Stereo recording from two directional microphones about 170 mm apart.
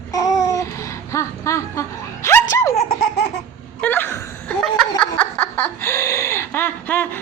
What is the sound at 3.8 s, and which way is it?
Laughter, 10° left (ahead or behind).